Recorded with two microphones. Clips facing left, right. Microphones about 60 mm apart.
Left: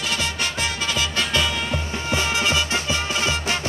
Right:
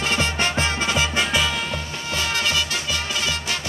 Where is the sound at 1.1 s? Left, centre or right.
Centre.